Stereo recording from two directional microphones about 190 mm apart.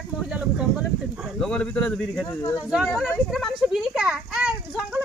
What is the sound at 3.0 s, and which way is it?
Speech, centre (ahead or behind).